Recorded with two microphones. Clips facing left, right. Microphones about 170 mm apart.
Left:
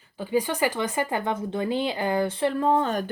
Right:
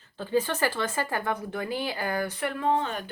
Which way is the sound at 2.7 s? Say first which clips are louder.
Left 2 dB; 40° left (ahead or behind).